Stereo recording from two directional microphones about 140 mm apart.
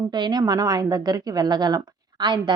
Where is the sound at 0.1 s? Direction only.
30° right (ahead or behind).